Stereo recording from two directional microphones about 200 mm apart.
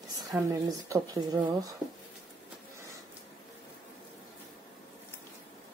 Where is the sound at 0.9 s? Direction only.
20° right (ahead or behind).